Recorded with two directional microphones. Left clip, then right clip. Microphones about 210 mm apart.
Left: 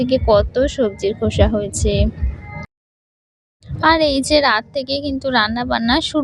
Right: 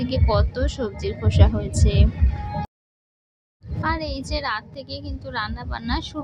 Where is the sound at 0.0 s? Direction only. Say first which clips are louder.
Left 9 dB; 25° left (ahead or behind).